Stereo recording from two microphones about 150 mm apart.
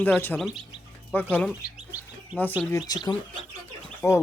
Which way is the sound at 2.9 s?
25° left (ahead or behind).